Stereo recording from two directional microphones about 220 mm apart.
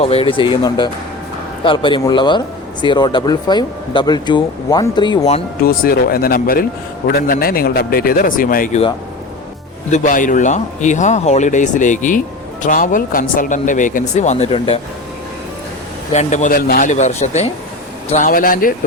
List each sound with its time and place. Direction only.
0.0 s speech: 25° left (ahead or behind)
5.6 s speech: 45° left (ahead or behind)
9.9 s speech: 35° left (ahead or behind)
16.1 s speech: 35° left (ahead or behind)